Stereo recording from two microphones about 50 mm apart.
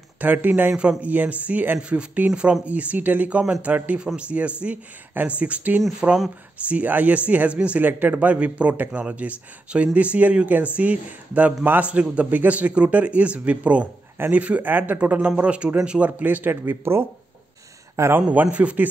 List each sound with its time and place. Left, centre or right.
0.2 s speech: right
0.7 s a man's voice: right
11.8 s a man's voice: right
16.2 s speech: right
16.6 s speech: right
18.0 s a man's voice: right
18.3 s speech: right